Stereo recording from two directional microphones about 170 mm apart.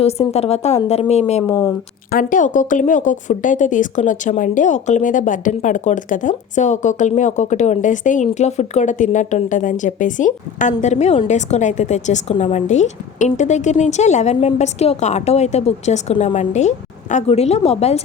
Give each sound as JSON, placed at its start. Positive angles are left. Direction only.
{"t": 0.0, "sound": "a woman's voice", "side_deg": 40}
{"t": 1.5, "sound": "speech", "side_deg": 20}
{"t": 2.0, "sound": "speech", "side_deg": 55}